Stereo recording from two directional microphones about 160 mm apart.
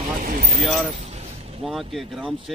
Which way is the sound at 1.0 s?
40° right (ahead or behind).